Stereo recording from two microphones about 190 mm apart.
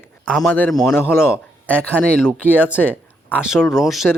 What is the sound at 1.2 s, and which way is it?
Speech, 5° right (ahead or behind).